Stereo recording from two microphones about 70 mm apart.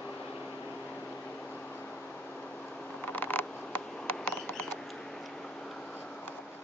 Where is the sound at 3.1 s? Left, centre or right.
Left.